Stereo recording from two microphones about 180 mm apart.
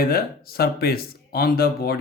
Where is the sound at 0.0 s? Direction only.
55° left (ahead or behind).